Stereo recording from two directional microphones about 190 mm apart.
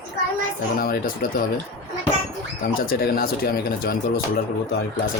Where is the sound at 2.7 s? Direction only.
50° left (ahead or behind).